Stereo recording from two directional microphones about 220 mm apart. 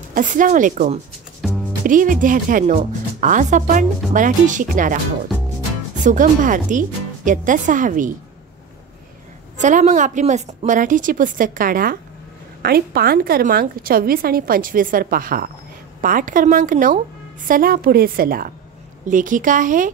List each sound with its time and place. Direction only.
0.1 s a woman's voice: 35° right (ahead or behind)
1.4 s music: centre (ahead or behind)
1.9 s a woman's voice: 35° right (ahead or behind)
6.0 s a woman's voice: 35° right (ahead or behind)
9.6 s a woman's voice: 35° right (ahead or behind)